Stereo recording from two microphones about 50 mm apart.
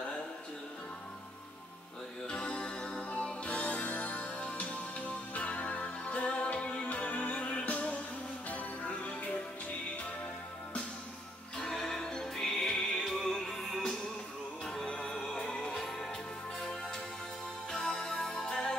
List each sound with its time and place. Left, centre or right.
2.2 s music: left
11.5 s music: centre
17.6 s music: centre